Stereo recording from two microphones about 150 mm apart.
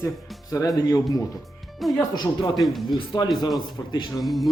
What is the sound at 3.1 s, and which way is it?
Speech, 30° left (ahead or behind).